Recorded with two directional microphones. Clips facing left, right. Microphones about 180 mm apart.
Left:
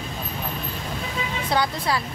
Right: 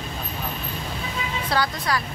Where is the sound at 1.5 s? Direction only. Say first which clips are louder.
Left 1 dB; 25° left (ahead or behind).